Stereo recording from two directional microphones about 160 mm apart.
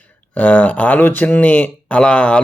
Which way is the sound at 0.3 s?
10° left (ahead or behind).